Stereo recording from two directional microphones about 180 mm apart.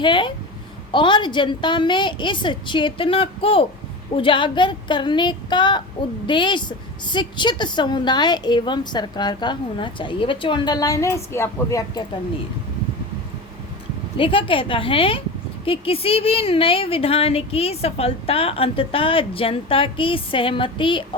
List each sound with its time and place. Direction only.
0.0 s speech: 25° left (ahead or behind)
14.2 s a woman's voice: 30° left (ahead or behind)